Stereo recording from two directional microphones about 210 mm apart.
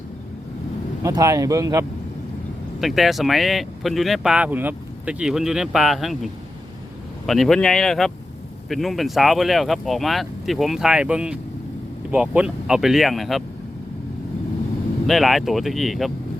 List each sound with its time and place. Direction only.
1.0 s speech: 15° right (ahead or behind)
2.8 s speech: centre (ahead or behind)
15.0 s speech: centre (ahead or behind)